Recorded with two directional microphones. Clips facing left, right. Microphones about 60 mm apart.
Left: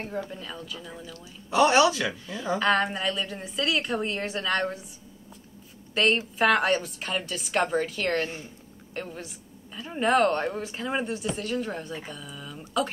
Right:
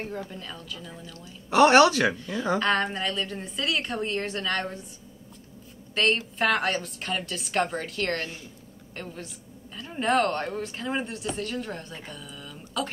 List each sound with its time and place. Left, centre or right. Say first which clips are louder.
0.0 s a woman's voice: left 1 dB; centre
1.5 s speech: right 3 dB; right
2.1 s a woman's voice: right 2 dB; centre
6.0 s a woman's voice: left 1 dB; centre